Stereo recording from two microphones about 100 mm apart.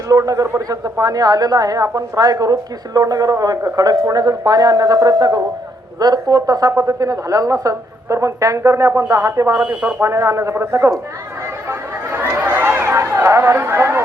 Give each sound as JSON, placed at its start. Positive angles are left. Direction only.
{"t": 0.1, "sound": "speech", "side_deg": -35}
{"t": 9.6, "sound": "speech", "side_deg": -15}
{"t": 10.0, "sound": "a man's voice", "side_deg": -30}
{"t": 12.1, "sound": "a sound", "side_deg": -20}